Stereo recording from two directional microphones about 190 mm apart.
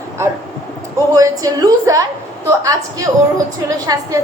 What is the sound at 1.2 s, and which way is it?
A woman's voice, 20° right (ahead or behind).